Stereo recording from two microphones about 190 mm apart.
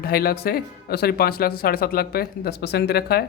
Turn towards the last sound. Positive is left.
turn(degrees=55)  # may be behind; listen again after turning